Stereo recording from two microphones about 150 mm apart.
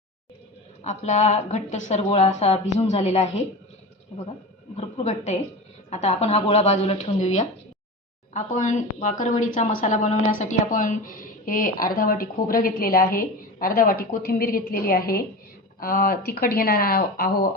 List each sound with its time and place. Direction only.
0.9 s speech: 50° left (ahead or behind)
4.8 s a woman's voice: 50° left (ahead or behind); by 15.2 s 85° left
15.8 s speech: 75° left (ahead or behind)